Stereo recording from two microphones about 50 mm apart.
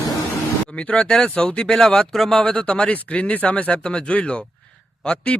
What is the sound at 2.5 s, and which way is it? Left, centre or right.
Speech, left.